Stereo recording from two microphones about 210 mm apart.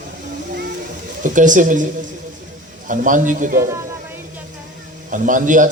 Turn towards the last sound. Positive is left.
turn(degrees=-40)  # may be behind; listen again after turning